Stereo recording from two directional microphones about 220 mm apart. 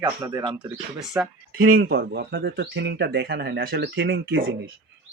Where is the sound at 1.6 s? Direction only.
45° right (ahead or behind); by 4.5 s 65° right (ahead or behind).